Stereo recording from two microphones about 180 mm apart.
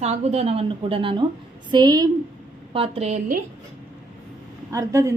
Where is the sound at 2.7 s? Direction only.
30° right (ahead or behind).